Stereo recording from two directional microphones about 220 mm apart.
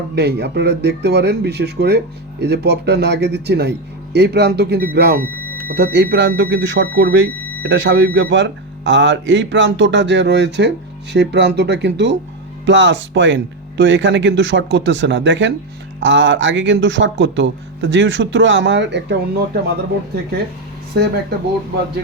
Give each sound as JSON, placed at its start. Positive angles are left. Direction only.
{"t": 0.2, "sound": "speech", "side_deg": -50}
{"t": 20.9, "sound": "speech", "side_deg": -45}